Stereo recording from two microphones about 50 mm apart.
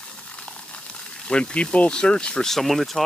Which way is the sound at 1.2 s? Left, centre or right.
Left.